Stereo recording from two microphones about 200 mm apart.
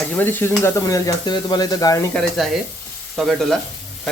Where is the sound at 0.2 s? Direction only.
10° left (ahead or behind).